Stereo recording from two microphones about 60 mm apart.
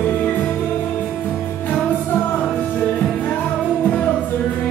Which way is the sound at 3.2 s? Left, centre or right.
Left.